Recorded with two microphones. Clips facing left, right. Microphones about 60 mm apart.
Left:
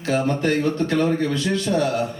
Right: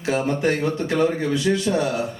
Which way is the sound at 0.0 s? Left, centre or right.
Centre.